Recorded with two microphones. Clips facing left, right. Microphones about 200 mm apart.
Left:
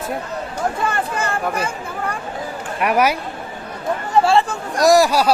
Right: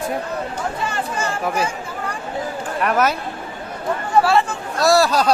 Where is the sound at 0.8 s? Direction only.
55° left (ahead or behind).